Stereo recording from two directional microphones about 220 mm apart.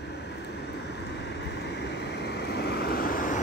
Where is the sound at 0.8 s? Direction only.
50° left (ahead or behind).